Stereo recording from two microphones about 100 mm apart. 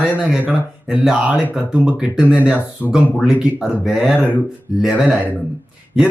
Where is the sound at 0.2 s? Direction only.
15° right (ahead or behind).